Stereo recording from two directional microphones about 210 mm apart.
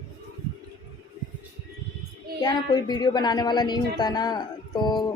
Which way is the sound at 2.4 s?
20° left (ahead or behind).